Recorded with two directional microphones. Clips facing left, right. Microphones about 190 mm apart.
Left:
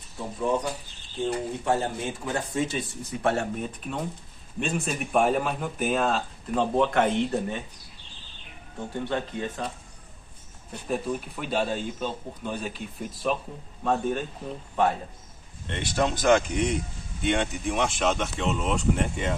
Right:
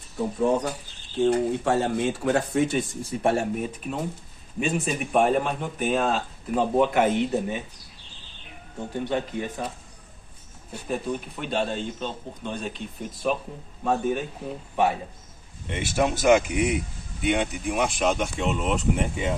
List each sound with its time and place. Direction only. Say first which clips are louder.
1.2 s speech: right 6 dB; 70° right (ahead or behind)
3.0 s speech: right 4 dB; 30° right (ahead or behind)
3.3 s a man's voice: right 2 dB; 10° right (ahead or behind)
9.0 s a man's voice: right 2 dB; 15° right (ahead or behind)
10.7 s a man's voice: even; centre (ahead or behind)